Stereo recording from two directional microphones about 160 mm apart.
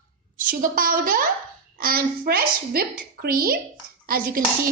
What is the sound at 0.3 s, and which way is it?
A woman's voice, 60° right (ahead or behind).